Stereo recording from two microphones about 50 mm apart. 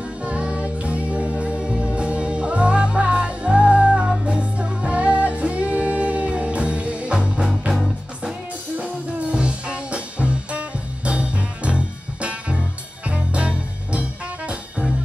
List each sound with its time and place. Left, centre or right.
0.2 s music: right
8.7 s music: right